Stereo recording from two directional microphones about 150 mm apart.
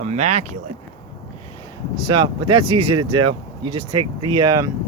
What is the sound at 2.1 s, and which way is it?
Speech, 30° right (ahead or behind).